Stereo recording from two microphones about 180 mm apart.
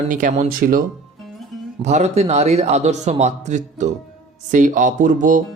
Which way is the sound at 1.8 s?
40° right (ahead or behind).